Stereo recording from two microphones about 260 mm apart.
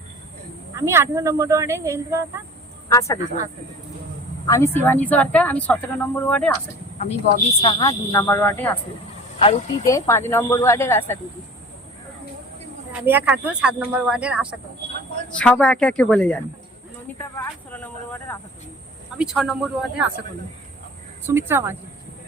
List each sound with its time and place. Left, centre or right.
0.8 s speech: centre
2.9 s speech: centre
4.4 s speech: centre
7.0 s speech: left; by 8.7 s centre
9.4 s speech: left
9.9 s speech: centre
12.9 s speech: centre
17.2 s a sound: centre
19.1 s speech: centre
21.2 s speech: centre